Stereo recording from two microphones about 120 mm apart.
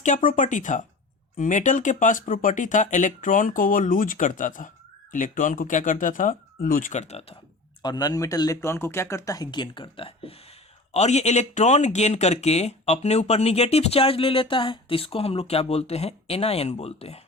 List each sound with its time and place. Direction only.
0.0 s speech: 90° left
6.8 s speech: 75° left (ahead or behind)
7.8 s speech: 35° left (ahead or behind); by 10.3 s 50° left (ahead or behind)
10.9 s speech: 70° left (ahead or behind)